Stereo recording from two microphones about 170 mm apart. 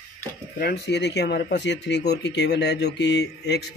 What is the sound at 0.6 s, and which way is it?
Speech, 75° left (ahead or behind).